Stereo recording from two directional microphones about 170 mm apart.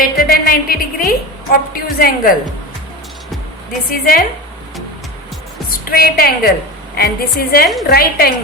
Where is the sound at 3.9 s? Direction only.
60° left (ahead or behind).